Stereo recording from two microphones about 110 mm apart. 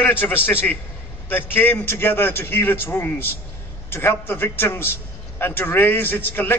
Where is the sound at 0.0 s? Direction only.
15° left (ahead or behind).